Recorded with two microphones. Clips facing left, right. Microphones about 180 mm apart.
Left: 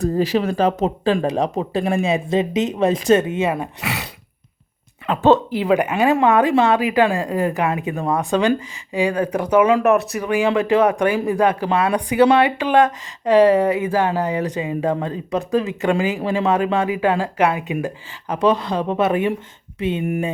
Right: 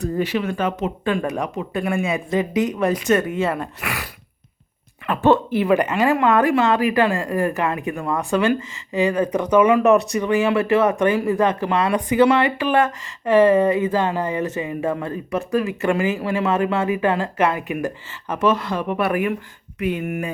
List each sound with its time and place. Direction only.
0.2 s speech: 35° left (ahead or behind); by 3.7 s 15° left (ahead or behind)
5.0 s speech: 20° left (ahead or behind)